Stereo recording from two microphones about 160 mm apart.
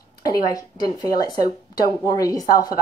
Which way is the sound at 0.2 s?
25° left (ahead or behind).